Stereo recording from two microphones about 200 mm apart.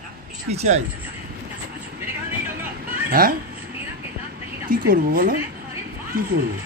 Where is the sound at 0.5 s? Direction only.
35° right (ahead or behind).